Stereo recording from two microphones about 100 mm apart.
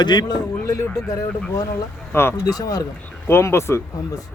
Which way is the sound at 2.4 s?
40° left (ahead or behind).